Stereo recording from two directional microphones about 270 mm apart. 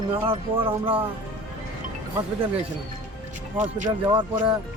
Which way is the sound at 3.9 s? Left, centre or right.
Centre.